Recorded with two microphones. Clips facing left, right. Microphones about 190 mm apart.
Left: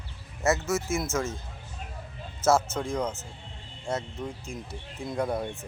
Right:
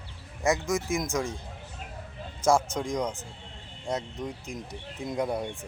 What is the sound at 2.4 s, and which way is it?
Speech, 15° right (ahead or behind).